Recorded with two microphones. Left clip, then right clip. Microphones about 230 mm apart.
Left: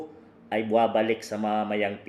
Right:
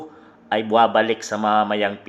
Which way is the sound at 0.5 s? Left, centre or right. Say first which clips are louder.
Right 7 dB; right.